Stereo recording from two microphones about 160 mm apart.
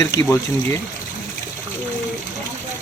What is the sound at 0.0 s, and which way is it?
Speech, 20° left (ahead or behind).